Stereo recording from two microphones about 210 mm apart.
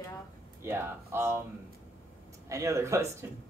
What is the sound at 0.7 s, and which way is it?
Speech, 10° right (ahead or behind).